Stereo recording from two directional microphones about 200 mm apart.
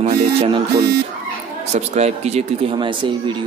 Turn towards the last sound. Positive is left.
turn(degrees=-25)  # may be behind; listen again after turning